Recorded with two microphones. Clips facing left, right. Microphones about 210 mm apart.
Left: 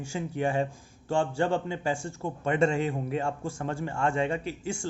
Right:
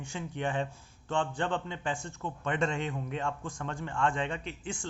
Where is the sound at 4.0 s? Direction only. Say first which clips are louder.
Left 4 dB; 10° left (ahead or behind).